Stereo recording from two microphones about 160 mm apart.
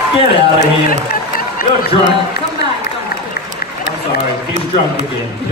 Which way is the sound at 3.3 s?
80° left.